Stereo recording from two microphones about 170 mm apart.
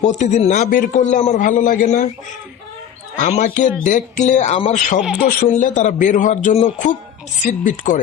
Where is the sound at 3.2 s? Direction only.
40° left (ahead or behind).